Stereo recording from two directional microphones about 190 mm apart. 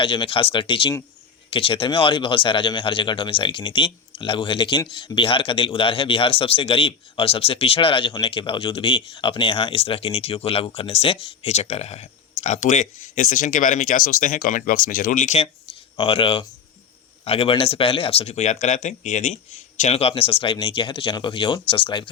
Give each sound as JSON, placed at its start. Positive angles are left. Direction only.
{"t": 0.0, "sound": "speech", "side_deg": 25}